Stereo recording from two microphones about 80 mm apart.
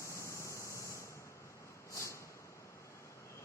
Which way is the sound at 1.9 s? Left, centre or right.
Left.